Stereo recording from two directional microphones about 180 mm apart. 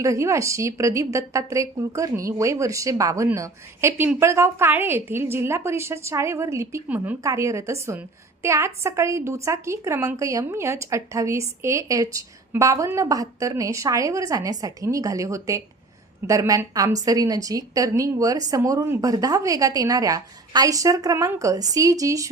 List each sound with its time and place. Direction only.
0.0 s a woman's voice: 15° right (ahead or behind)